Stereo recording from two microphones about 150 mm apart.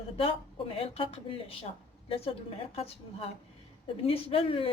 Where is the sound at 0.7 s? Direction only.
40° left (ahead or behind).